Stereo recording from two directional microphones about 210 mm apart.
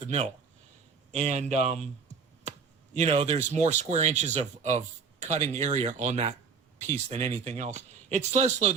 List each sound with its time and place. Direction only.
1.1 s speech: 35° right (ahead or behind)